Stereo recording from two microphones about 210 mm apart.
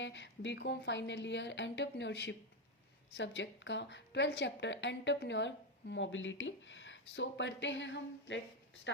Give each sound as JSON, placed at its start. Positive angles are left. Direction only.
{"t": 0.0, "sound": "a woman's voice", "side_deg": 60}